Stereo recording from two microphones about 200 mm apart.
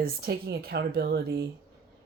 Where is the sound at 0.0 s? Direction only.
50° right (ahead or behind).